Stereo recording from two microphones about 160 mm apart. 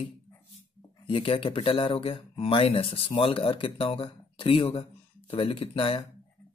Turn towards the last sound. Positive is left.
turn(degrees=35)  # may be behind; listen again after turning